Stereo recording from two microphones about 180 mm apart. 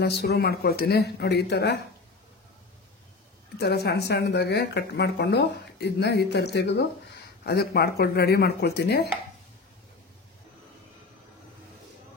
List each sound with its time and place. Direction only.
0.0 s speech: 65° left (ahead or behind)
3.5 s speech: 65° left (ahead or behind)